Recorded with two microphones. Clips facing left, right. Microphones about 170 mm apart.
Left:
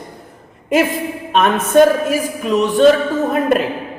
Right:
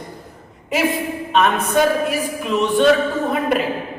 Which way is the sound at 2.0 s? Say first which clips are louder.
Left 4 dB; 40° left (ahead or behind).